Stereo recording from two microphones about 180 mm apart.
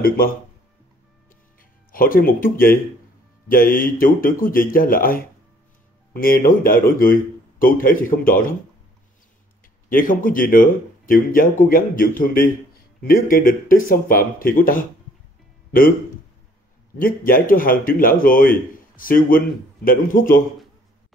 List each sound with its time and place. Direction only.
1.6 s a man's voice: 50° left (ahead or behind)
9.8 s a man's voice: 50° left (ahead or behind)
17.0 s a man's voice: 50° left (ahead or behind)